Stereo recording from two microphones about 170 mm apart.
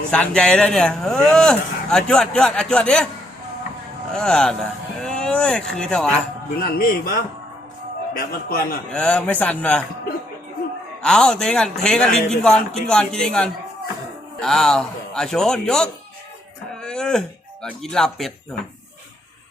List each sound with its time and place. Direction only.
0.1 s speech: 5° left (ahead or behind)
4.1 s speech: 5° left (ahead or behind)
6.6 s a man's voice: 60° left (ahead or behind)
8.1 s a man's voice: 60° left (ahead or behind)
8.9 s a man's voice: 5° left (ahead or behind)
11.0 s speech: 5° left (ahead or behind)
16.8 s music: 5° left (ahead or behind)